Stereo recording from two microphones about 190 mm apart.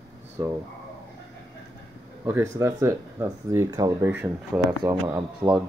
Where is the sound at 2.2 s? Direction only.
15° right (ahead or behind).